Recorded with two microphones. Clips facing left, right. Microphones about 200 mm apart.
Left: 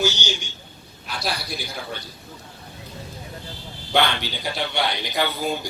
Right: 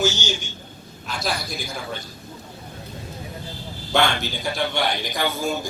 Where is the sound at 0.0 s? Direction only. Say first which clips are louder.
Right 1 dB; 45° right (ahead or behind).